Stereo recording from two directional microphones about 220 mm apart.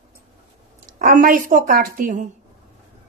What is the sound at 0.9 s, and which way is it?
A woman's voice, 40° right (ahead or behind).